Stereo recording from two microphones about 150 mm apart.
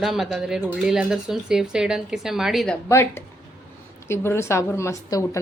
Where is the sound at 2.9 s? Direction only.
15° left (ahead or behind).